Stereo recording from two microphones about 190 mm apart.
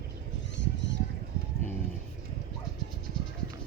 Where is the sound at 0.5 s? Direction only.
70° left (ahead or behind).